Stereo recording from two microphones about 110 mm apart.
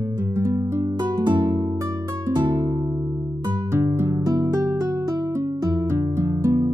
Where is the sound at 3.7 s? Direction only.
25° right (ahead or behind).